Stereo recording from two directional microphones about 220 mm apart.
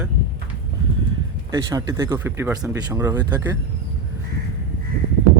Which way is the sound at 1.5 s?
15° right (ahead or behind).